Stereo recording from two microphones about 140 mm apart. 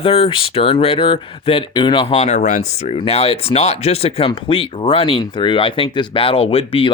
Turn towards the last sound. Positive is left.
turn(degrees=40)  # may be behind; listen again after turning